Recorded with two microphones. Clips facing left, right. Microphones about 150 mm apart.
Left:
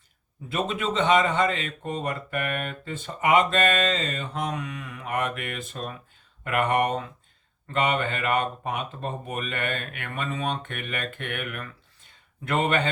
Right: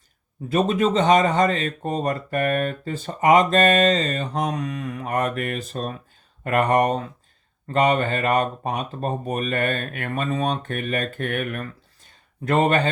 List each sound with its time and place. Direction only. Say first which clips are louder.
0.4 s speech: right 8 dB; 40° right (ahead or behind)